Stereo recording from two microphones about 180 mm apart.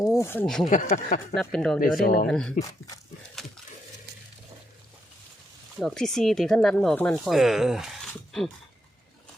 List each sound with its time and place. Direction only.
0.2 s speech: 15° left (ahead or behind)
0.4 s speech: 5° left (ahead or behind)
0.7 s speech: 45° left (ahead or behind)
1.4 s speech: 5° left (ahead or behind)
2.0 s speech: 55° left (ahead or behind)
2.2 s speech: 5° left (ahead or behind)
3.4 s wild animals: centre (ahead or behind)
5.8 s speech: 5° left (ahead or behind)